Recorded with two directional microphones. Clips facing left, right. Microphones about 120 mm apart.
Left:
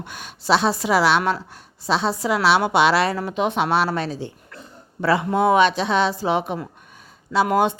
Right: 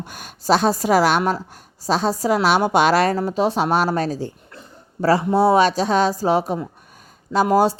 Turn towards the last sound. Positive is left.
turn(degrees=-35)  # may be behind; listen again after turning